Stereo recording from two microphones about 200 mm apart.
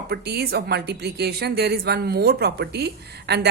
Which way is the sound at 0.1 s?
55° right (ahead or behind).